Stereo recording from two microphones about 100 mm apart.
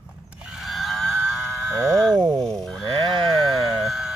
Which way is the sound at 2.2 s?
50° right (ahead or behind).